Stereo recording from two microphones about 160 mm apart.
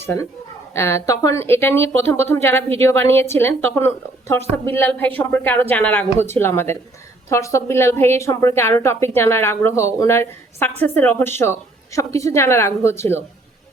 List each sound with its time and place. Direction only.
0.0 s a woman's voice: 15° left (ahead or behind)